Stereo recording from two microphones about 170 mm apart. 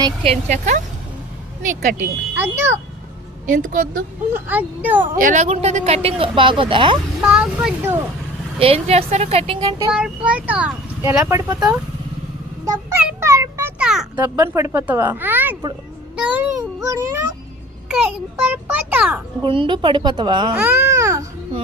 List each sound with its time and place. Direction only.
0.3 s a woman's voice: 45° right (ahead or behind)
2.4 s speech: 15° right (ahead or behind)
3.4 s a woman's voice: 55° right (ahead or behind)
4.4 s speech: 10° right (ahead or behind)
5.1 s speech: 50° right (ahead or behind); by 7.0 s 30° right (ahead or behind)
7.2 s speech: 5° right (ahead or behind)
8.5 s speech: 35° right (ahead or behind)
9.9 s speech: 5° right (ahead or behind)
12.6 s a sound: 10° right (ahead or behind)
14.3 s speech: 15° right (ahead or behind)
17.8 s speech: 5° right (ahead or behind)
19.4 s a woman's voice: 30° right (ahead or behind)
20.6 s speech: 10° right (ahead or behind)